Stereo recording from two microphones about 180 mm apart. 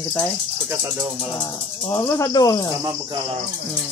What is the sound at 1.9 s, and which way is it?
Speech, 15° left (ahead or behind).